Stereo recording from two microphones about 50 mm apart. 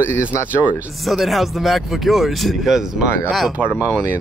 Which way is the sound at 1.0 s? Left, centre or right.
Centre.